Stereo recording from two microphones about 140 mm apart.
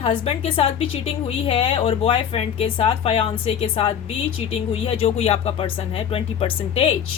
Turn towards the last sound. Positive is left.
turn(degrees=40)  # may be behind; listen again after turning